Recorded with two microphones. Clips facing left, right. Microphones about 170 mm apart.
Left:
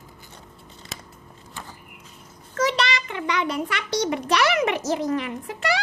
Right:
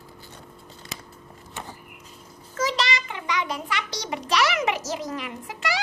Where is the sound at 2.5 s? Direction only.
60° left (ahead or behind).